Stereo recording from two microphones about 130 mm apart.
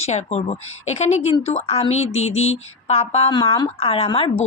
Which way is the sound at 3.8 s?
50° left (ahead or behind).